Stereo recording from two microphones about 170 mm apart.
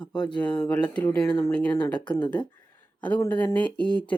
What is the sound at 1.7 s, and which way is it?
Speech, 25° left (ahead or behind).